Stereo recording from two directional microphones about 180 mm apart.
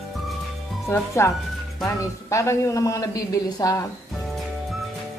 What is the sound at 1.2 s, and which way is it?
A man's voice, 15° left (ahead or behind).